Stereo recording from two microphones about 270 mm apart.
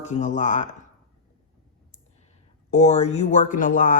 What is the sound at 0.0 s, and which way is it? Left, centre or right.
Speech, left.